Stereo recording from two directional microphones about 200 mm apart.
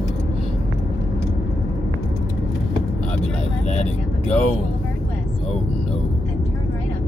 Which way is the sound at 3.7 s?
35° left (ahead or behind).